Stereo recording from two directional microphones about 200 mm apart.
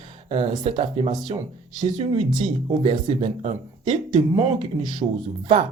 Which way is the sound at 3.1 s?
30° right (ahead or behind).